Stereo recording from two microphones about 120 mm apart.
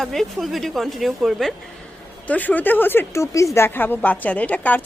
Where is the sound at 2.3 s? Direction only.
15° left (ahead or behind).